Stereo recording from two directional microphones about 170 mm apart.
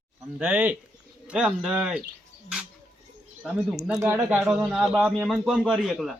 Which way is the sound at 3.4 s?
Centre (ahead or behind).